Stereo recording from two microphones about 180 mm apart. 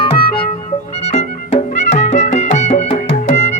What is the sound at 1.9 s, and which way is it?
Music, 40° left (ahead or behind).